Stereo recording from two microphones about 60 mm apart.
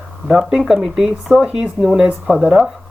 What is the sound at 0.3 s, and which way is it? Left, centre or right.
Speech, centre.